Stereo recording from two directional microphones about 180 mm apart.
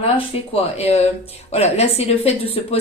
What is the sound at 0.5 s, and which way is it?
A woman's voice, 35° left (ahead or behind).